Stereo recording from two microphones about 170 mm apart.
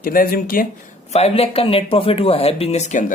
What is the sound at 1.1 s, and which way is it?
Speech, 40° left (ahead or behind).